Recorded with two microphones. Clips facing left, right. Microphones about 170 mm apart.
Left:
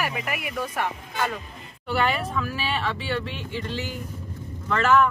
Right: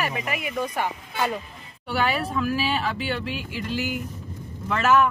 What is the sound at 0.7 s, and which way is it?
Speech, 10° right (ahead or behind).